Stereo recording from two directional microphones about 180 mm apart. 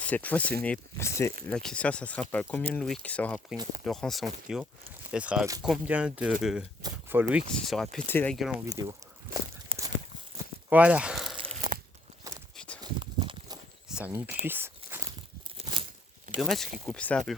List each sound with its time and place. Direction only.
0.0 s speech: 10° left (ahead or behind)
1.5 s speech: 5° left (ahead or behind)
7.5 s speech: 5° left (ahead or behind)
8.6 s speech: 20° right (ahead or behind)
9.7 s a sound: 30° right (ahead or behind)
10.7 s speech: 10° right (ahead or behind)
12.5 s a sound: 5° left (ahead or behind)
12.8 s a sound: 25° right (ahead or behind)
13.8 s speech: 5° right (ahead or behind)
14.4 s walk: 10° right (ahead or behind)
16.4 s speech: centre (ahead or behind)